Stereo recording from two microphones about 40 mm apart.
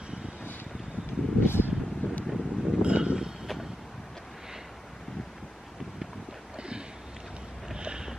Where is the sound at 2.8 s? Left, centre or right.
Right.